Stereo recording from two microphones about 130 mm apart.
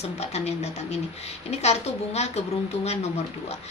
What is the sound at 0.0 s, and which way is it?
A woman's voice, 55° left (ahead or behind).